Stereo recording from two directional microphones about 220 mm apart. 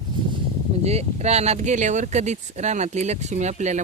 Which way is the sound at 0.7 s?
30° right (ahead or behind).